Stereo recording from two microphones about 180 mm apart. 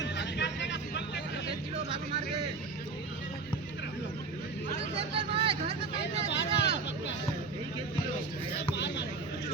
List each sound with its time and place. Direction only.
0.0 s vehicle: 75° left (ahead or behind)
4.9 s vehicle: 30° right (ahead or behind)
6.0 s vehicle: 70° left (ahead or behind)
8.5 s a sound: 75° left (ahead or behind)